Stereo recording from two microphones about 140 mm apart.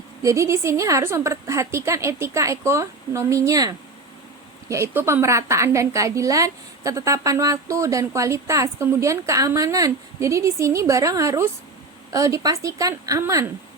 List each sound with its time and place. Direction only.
0.2 s a woman's voice: 20° right (ahead or behind)